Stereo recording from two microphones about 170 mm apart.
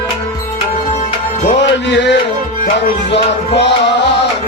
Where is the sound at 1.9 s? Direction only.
90° left.